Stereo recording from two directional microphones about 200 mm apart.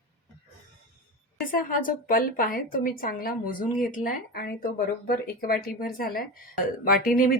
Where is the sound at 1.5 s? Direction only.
45° left (ahead or behind).